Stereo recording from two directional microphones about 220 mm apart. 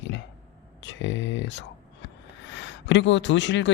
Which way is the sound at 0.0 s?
55° left (ahead or behind).